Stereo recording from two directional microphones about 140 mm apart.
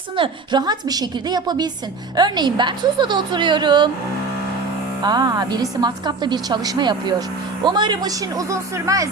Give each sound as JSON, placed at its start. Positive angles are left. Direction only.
{"t": 0.2, "sound": "a woman's voice", "side_deg": -30}
{"t": 5.0, "sound": "a woman's voice", "side_deg": -30}